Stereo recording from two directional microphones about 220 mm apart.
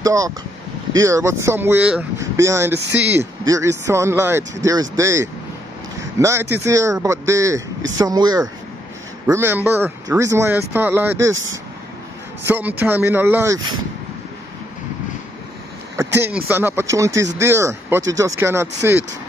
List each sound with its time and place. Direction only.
0.0 s speech: 15° right (ahead or behind)
11.3 s speech: 60° right (ahead or behind)
12.4 s speech: 10° right (ahead or behind)
16.0 s speech: 10° right (ahead or behind)